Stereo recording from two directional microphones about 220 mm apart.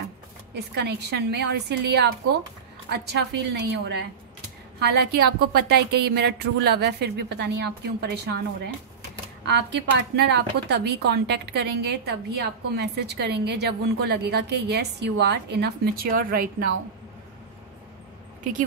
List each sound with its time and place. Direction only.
0.6 s a woman's voice: 50° right (ahead or behind)
9.4 s a woman's voice: 50° right (ahead or behind)